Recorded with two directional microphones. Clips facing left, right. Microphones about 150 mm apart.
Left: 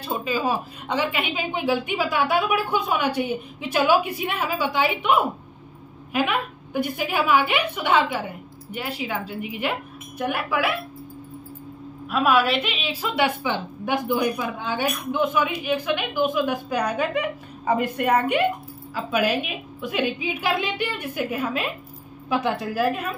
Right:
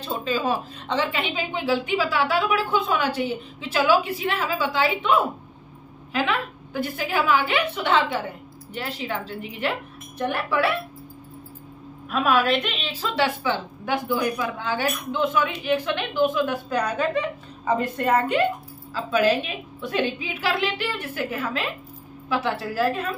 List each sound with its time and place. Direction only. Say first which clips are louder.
0.0 s a woman's voice: even; 10° left (ahead or behind)
12.1 s a woman's voice: left 1 dB; 5° left (ahead or behind)